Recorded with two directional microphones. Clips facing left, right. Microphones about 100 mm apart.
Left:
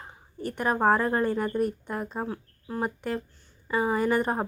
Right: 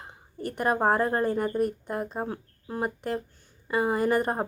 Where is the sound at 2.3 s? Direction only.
20° right (ahead or behind).